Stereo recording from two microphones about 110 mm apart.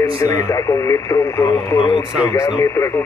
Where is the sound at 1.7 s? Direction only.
50° left (ahead or behind).